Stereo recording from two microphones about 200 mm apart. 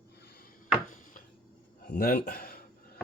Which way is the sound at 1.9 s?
50° left (ahead or behind).